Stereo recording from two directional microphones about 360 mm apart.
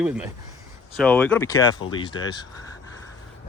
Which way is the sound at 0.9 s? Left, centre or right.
Centre.